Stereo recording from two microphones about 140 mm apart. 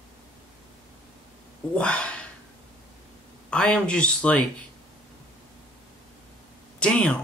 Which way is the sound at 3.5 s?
5° left (ahead or behind).